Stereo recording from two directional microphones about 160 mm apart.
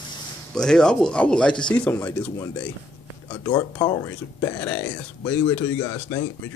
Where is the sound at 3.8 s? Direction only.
25° left (ahead or behind).